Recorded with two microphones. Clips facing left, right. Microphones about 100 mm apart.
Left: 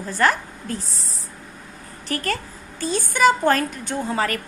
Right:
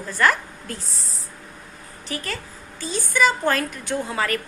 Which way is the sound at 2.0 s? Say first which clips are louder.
Left 5 dB; 50° left (ahead or behind).